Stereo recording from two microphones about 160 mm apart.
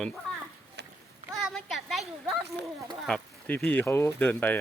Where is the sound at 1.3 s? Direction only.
Centre (ahead or behind).